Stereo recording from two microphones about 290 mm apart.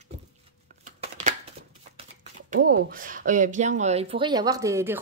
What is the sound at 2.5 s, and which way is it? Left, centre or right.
A woman's voice, right.